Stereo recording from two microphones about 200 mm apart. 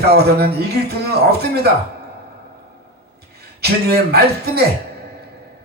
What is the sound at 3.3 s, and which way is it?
A man's voice, 55° right (ahead or behind).